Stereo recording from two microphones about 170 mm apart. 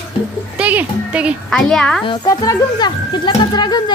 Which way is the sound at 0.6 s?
10° right (ahead or behind).